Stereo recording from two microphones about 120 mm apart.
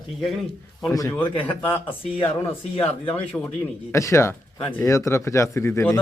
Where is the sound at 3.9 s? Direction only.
25° left (ahead or behind).